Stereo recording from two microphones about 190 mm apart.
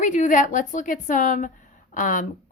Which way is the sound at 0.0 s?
40° left (ahead or behind).